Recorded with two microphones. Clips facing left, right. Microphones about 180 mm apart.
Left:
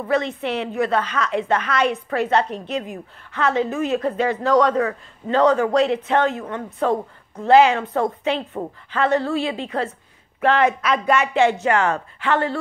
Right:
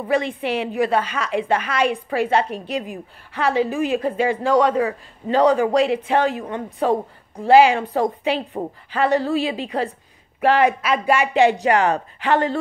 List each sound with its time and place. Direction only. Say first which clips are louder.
0.1 s speech: right 1 dB; 10° right (ahead or behind)